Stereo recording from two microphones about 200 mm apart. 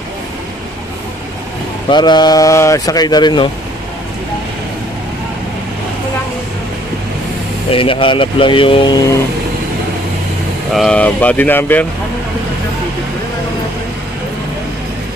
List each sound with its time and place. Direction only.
1.9 s speech: 20° left (ahead or behind)
7.7 s speech: 25° left (ahead or behind)
10.7 s speech: centre (ahead or behind)